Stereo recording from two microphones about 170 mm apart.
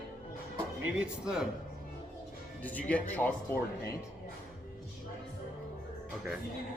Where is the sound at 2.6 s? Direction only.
10° left (ahead or behind).